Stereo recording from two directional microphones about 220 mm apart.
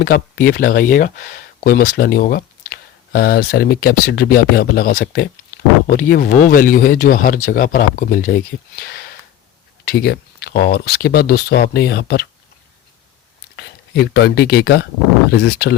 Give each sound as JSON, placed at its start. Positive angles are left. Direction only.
{"t": 0.0, "sound": "speech", "side_deg": 40}
{"t": 13.6, "sound": "speech", "side_deg": 45}